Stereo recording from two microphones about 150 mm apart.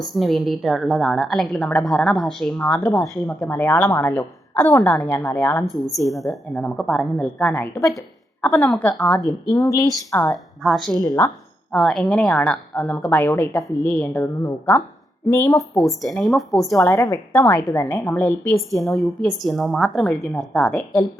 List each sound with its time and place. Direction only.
0.1 s a woman's voice: centre (ahead or behind); by 5.6 s 15° left (ahead or behind)
6.1 s a woman's voice: centre (ahead or behind)
9.6 s a woman's voice: 20° left (ahead or behind)
10.6 s a woman's voice: centre (ahead or behind)
10.9 s a woman's voice: 25° left (ahead or behind)
11.7 s a woman's voice: 5° left (ahead or behind)
15.5 s a woman's voice: centre (ahead or behind)
16.7 s a woman's voice: 20° left (ahead or behind)
18.8 s a woman's voice: centre (ahead or behind)